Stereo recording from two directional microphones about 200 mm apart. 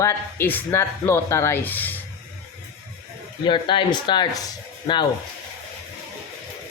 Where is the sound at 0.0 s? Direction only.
15° left (ahead or behind).